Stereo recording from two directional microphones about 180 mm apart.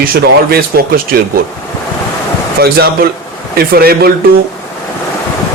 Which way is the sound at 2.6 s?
60° right (ahead or behind).